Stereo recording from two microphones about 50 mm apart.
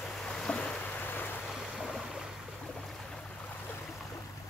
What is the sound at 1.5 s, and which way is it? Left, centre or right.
Waves, centre.